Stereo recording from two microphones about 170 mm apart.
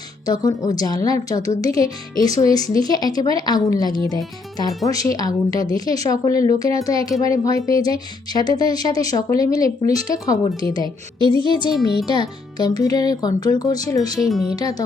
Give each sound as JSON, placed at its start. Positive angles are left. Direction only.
{"t": 0.3, "sound": "speech", "side_deg": 20}
{"t": 1.4, "sound": "speech", "side_deg": -40}
{"t": 1.7, "sound": "speech", "side_deg": 20}
{"t": 14.3, "sound": "speech", "side_deg": 0}
{"t": 14.5, "sound": "speech", "side_deg": 20}